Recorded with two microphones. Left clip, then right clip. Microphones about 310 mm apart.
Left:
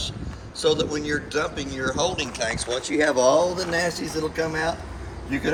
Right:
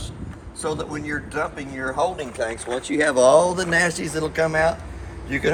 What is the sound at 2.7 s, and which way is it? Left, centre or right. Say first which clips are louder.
Speech: right 2 dB; right.